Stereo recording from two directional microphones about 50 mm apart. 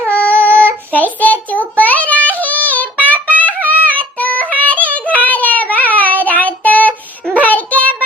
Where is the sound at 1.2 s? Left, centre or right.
Left.